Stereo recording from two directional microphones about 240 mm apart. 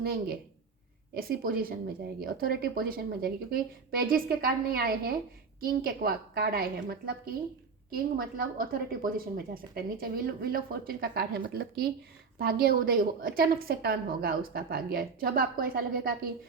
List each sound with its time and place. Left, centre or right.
0.0 s a woman's voice: right